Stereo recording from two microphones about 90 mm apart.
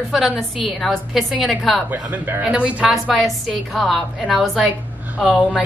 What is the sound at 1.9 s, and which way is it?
A woman's voice, 20° right (ahead or behind).